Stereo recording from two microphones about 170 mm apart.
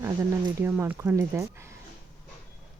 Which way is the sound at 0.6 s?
15° right (ahead or behind).